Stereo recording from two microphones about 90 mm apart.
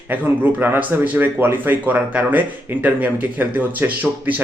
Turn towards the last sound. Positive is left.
turn(degrees=-15)  # may be behind; listen again after turning